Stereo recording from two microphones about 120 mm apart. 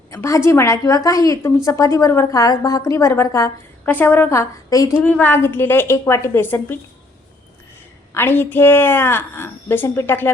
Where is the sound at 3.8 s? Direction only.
15° left (ahead or behind).